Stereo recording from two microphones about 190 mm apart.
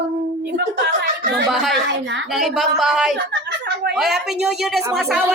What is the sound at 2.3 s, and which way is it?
A woman's voice, centre (ahead or behind).